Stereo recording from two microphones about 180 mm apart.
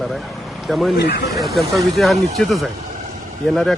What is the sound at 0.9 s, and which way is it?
Speech, 70° left (ahead or behind).